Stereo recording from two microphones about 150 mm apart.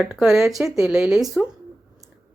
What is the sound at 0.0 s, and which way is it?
Speech, 5° right (ahead or behind).